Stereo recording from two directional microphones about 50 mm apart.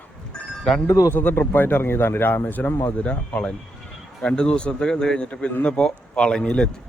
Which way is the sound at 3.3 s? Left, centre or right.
Centre.